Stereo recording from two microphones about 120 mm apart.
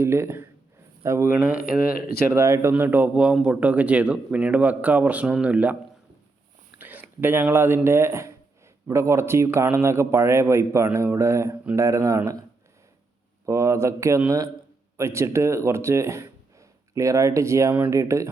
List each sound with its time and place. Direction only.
0.0 s a man's voice: 20° right (ahead or behind)
6.7 s a man's voice: 15° right (ahead or behind)